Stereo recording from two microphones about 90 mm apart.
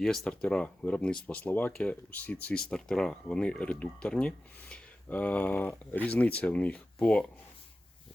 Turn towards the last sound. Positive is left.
turn(degrees=10)  # may be behind; listen again after turning